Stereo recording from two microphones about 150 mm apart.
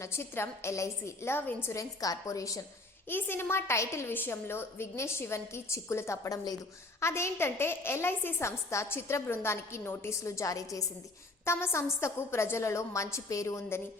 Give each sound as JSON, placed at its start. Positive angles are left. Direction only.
{"t": 0.0, "sound": "a woman's voice", "side_deg": 15}